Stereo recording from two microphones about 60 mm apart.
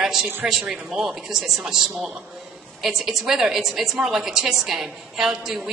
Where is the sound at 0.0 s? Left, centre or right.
Centre.